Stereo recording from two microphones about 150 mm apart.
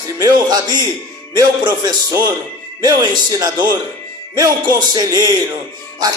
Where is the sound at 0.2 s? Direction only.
25° right (ahead or behind).